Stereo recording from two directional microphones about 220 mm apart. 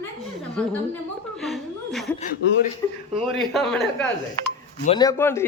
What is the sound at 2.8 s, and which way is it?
Speech, 15° left (ahead or behind).